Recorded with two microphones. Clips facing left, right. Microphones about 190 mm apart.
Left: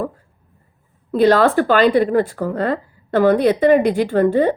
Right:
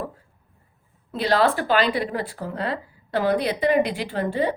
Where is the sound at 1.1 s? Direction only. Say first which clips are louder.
Left 8 dB; 50° left (ahead or behind).